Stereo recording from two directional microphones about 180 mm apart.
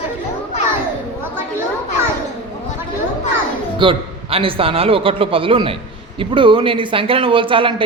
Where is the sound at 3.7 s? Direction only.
30° right (ahead or behind).